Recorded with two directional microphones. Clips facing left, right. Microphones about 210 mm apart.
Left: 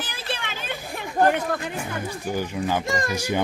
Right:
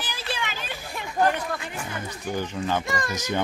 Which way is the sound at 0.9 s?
50° left (ahead or behind).